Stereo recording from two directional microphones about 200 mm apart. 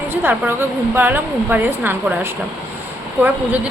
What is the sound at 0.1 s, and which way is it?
A woman's voice, 10° right (ahead or behind).